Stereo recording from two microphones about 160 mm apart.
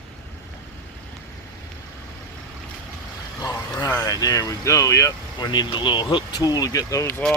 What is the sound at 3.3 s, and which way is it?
Vehicle, 20° left (ahead or behind).